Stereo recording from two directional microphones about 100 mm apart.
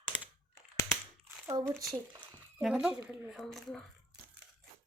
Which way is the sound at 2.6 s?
5° right (ahead or behind).